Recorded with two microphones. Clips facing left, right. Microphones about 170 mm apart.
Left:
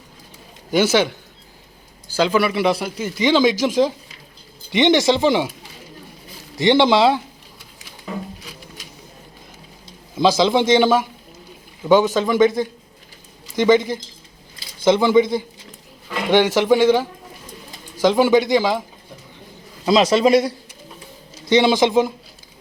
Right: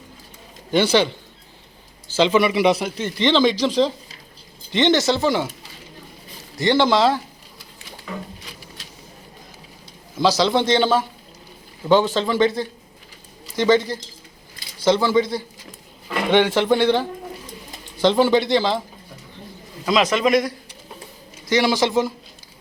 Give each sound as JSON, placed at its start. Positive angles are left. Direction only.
{"t": 0.7, "sound": "a man's voice", "side_deg": 5}
{"t": 2.2, "sound": "speech", "side_deg": 5}
{"t": 4.7, "sound": "a man's voice", "side_deg": 15}
{"t": 6.6, "sound": "a man's voice", "side_deg": 20}
{"t": 10.2, "sound": "a man's voice", "side_deg": 15}
{"t": 19.8, "sound": "a man's voice", "side_deg": 30}
{"t": 21.5, "sound": "speech", "side_deg": 20}